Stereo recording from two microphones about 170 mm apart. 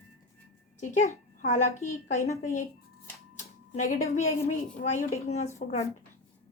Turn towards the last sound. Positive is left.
turn(degrees=40)  # may be behind; listen again after turning